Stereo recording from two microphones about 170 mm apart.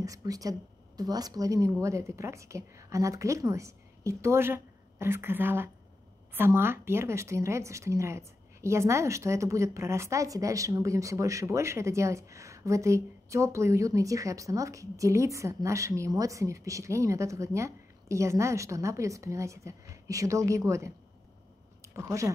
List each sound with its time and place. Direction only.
0.0 s a woman's voice: 20° right (ahead or behind)